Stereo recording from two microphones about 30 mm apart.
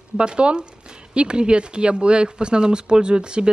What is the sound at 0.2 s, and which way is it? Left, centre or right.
Speech, right.